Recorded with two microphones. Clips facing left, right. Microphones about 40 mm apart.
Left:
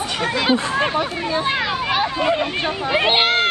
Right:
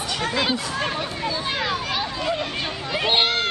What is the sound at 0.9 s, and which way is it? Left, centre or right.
Speech, centre.